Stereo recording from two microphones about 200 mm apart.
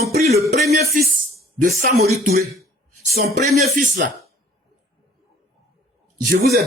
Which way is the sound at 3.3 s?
35° right (ahead or behind).